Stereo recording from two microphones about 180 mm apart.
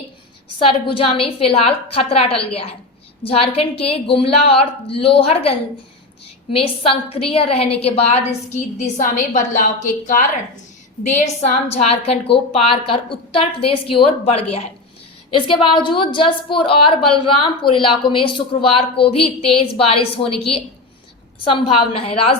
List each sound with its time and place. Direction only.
0.6 s a woman's voice: 30° left (ahead or behind)